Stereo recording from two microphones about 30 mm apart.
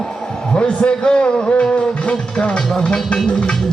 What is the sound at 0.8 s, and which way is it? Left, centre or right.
Music, left.